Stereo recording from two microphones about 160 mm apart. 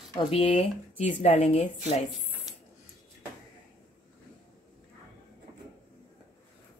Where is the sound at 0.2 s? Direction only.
35° left (ahead or behind).